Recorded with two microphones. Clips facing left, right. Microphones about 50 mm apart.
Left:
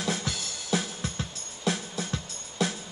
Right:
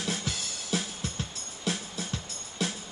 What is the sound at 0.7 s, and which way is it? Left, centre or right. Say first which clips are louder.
Music: left 3 dB; left.